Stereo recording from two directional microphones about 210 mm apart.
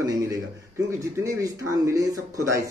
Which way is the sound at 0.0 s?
15° right (ahead or behind).